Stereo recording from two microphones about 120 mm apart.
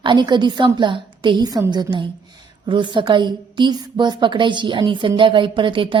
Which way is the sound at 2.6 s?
40° right (ahead or behind).